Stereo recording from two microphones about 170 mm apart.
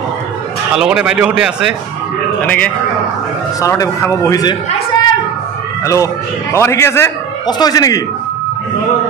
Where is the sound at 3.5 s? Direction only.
20° left (ahead or behind).